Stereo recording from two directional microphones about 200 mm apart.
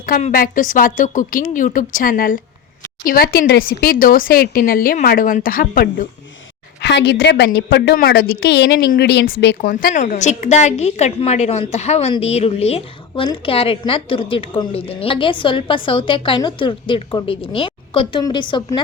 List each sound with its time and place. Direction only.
0.0 s a woman's voice: 45° left (ahead or behind)
6.8 s a woman's voice: 60° left (ahead or behind); by 18.8 s 25° left (ahead or behind)